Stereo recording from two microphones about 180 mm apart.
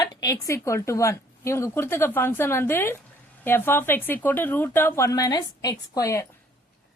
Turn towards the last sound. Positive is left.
turn(degrees=20)  # may be behind; listen again after turning